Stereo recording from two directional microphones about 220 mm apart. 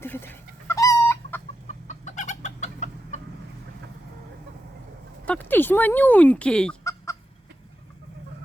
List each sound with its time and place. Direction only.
0.0 s chicken: 10° left (ahead or behind)
1.6 s chicken: 35° left (ahead or behind)
5.2 s chicken: 5° left (ahead or behind)